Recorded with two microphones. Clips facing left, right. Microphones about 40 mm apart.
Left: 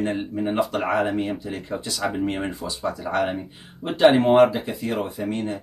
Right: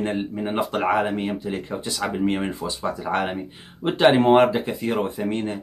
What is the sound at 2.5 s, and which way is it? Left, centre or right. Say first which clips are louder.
Speech: right 2 dB; right.